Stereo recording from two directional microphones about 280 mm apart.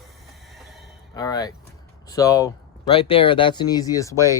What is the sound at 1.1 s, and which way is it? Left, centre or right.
Speech, centre.